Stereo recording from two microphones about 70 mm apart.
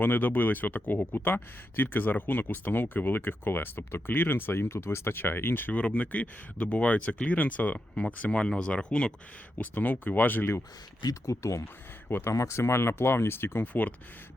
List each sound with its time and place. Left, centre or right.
0.0 s speech: left
5.7 s speech: centre
9.6 s speech: left
11.0 s speech: left
12.0 s speech: left
12.3 s speech: left